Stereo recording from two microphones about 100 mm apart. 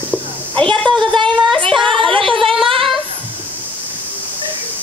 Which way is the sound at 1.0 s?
55° right (ahead or behind).